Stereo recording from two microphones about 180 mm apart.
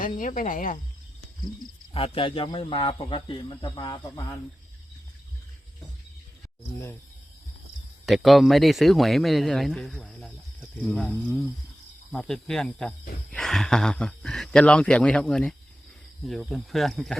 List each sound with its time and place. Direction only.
0.0 s speech: 45° left (ahead or behind)
1.9 s a man's voice: 30° left (ahead or behind)
8.0 s speech: centre (ahead or behind)
12.1 s speech: centre (ahead or behind)